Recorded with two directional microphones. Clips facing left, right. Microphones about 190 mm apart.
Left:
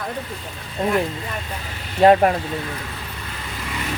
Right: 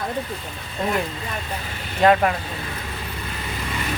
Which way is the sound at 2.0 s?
35° left (ahead or behind).